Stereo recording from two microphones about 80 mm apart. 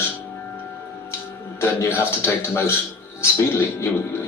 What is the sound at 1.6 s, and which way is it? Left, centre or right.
A woman's voice, left.